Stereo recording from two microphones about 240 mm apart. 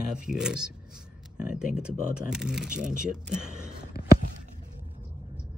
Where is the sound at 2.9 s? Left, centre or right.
Right.